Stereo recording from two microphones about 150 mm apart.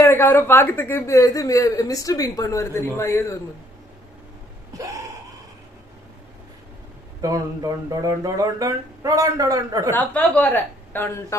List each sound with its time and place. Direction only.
0.0 s speech: 15° left (ahead or behind)
7.2 s speech: 25° right (ahead or behind)
9.9 s a woman's voice: 10° left (ahead or behind)